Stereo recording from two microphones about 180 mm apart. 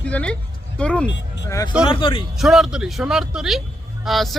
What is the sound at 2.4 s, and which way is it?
Speech, centre (ahead or behind).